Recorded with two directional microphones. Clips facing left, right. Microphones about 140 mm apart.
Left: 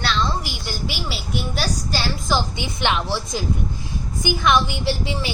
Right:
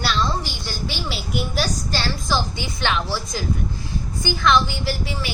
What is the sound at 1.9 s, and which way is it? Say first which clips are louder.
A woman's voice: left 1 dB; 10° left (ahead or behind).